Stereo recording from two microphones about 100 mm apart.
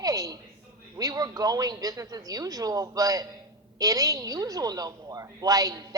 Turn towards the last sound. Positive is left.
turn(degrees=-35)  # may be behind; listen again after turning